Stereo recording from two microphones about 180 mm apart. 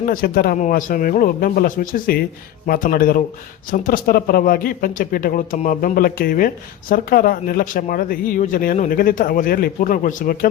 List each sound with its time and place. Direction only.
0.0 s speech: 50° left (ahead or behind)